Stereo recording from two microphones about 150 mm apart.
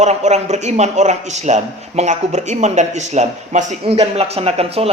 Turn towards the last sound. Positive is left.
turn(degrees=-40)  # may be behind; listen again after turning